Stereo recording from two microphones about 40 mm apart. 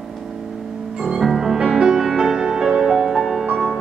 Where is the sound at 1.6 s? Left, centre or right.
Centre.